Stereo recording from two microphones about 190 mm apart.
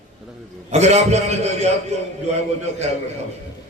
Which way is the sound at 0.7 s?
35° right (ahead or behind).